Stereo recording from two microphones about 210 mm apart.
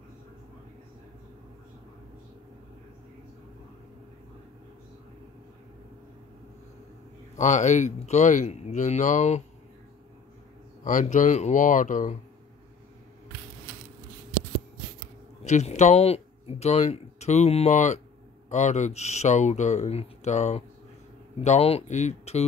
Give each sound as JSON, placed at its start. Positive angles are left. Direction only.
{"t": 7.3, "sound": "speech", "side_deg": 35}
{"t": 10.8, "sound": "speech", "side_deg": 35}
{"t": 15.4, "sound": "speech", "side_deg": 35}